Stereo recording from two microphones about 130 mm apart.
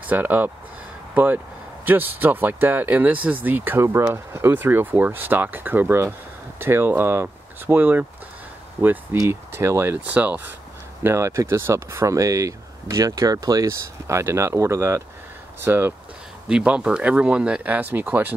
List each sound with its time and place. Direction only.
0.0 s speech: 10° right (ahead or behind)